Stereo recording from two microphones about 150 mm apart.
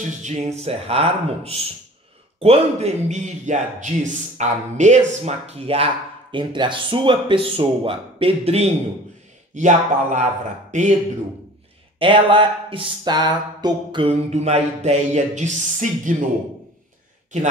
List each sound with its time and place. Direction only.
0.2 s speech: 50° right (ahead or behind)
6.3 s speech: 30° right (ahead or behind)
9.5 s speech: 55° right (ahead or behind)
12.0 s speech: 35° right (ahead or behind)
14.0 s speech: 45° right (ahead or behind)